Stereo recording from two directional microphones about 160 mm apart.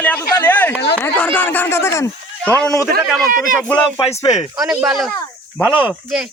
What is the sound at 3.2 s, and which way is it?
Speech, 60° right (ahead or behind).